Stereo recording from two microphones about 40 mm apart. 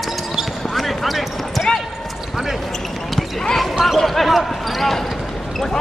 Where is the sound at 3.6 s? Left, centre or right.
Centre.